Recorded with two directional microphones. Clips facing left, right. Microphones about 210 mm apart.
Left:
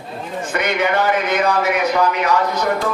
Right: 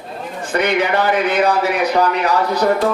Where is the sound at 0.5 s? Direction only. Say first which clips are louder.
Right 2 dB; 35° right (ahead or behind).